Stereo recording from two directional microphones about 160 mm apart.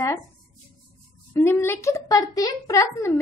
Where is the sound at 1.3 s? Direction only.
15° left (ahead or behind).